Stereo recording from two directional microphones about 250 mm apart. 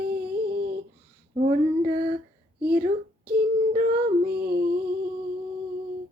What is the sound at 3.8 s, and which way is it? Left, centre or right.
Music, right.